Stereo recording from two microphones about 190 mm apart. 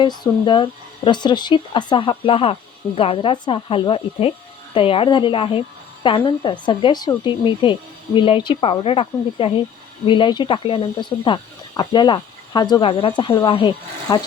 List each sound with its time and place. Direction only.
0.0 s a woman's voice: 25° left (ahead or behind)